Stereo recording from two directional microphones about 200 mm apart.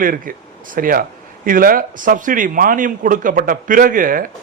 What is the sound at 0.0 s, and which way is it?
A man's voice, 45° right (ahead or behind).